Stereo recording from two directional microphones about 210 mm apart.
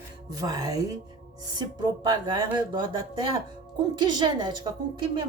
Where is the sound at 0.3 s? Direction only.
15° right (ahead or behind).